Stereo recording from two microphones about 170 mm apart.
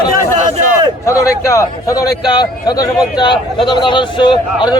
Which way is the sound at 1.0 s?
15° left (ahead or behind).